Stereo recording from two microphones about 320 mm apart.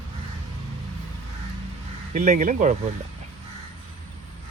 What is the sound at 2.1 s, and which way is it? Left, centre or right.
Speech, right.